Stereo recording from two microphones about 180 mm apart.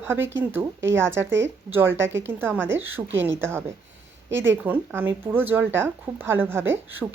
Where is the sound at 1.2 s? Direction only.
90° right.